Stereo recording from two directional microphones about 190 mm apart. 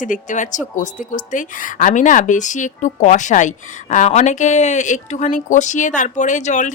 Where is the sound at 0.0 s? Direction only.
40° left (ahead or behind).